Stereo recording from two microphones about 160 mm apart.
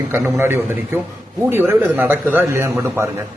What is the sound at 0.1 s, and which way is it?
A man's voice, 15° right (ahead or behind).